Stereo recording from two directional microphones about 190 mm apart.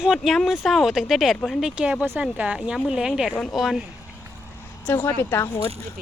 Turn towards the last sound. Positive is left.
turn(degrees=15)  # may be behind; listen again after turning